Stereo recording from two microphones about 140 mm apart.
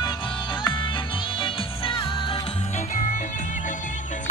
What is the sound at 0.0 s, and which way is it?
Music, 35° left (ahead or behind).